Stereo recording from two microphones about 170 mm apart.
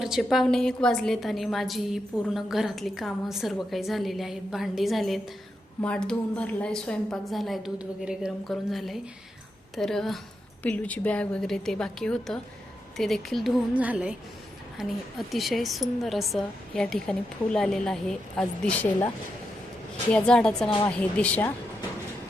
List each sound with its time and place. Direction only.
0.0 s a woman's voice: centre (ahead or behind)
20.7 s a woman's voice: 30° left (ahead or behind)
21.0 s speech: 10° left (ahead or behind)